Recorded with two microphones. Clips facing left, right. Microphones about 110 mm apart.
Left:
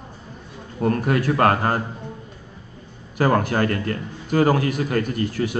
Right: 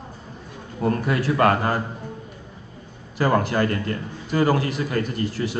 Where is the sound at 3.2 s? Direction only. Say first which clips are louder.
Left 1 dB; 50° left (ahead or behind).